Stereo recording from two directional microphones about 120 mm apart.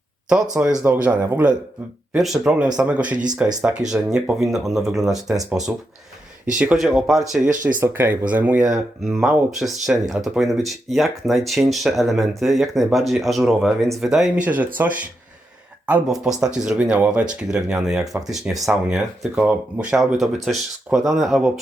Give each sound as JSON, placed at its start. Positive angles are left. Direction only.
{"t": 0.6, "sound": "speech", "side_deg": -10}
{"t": 6.7, "sound": "speech", "side_deg": 0}
{"t": 7.5, "sound": "speech", "side_deg": -90}
{"t": 7.8, "sound": "speech", "side_deg": -15}
{"t": 14.4, "sound": "speech", "side_deg": -15}